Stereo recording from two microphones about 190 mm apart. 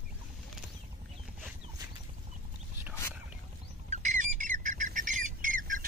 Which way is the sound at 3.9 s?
40° right (ahead or behind).